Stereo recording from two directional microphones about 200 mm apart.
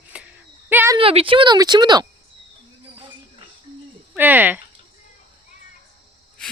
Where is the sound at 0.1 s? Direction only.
5° right (ahead or behind).